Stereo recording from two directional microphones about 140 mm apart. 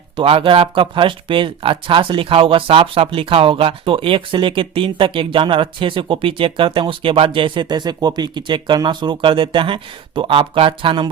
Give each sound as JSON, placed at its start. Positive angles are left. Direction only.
{"t": 0.2, "sound": "speech", "side_deg": -40}